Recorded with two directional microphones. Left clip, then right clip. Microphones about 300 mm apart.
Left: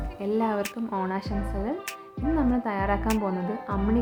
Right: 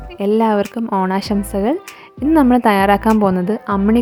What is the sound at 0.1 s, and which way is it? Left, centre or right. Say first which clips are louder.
Speech: right 12 dB; right.